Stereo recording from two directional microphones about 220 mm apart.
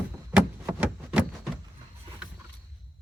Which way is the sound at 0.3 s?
5° right (ahead or behind).